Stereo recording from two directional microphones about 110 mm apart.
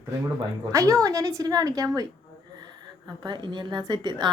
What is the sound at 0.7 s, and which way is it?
A woman's voice, 30° right (ahead or behind).